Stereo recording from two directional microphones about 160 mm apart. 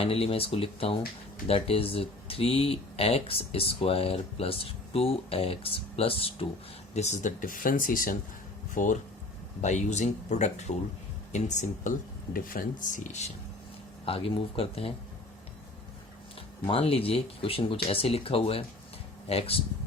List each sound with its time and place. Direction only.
0.0 s speech: 40° left (ahead or behind)
14.0 s speech: 35° left (ahead or behind)
16.6 s speech: 35° left (ahead or behind)